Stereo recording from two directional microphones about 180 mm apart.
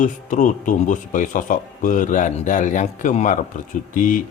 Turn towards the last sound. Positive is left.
turn(degrees=45)  # may be behind; listen again after turning